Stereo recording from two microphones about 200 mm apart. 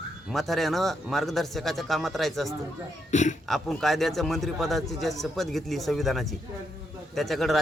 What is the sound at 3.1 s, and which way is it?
Speech, 35° left (ahead or behind).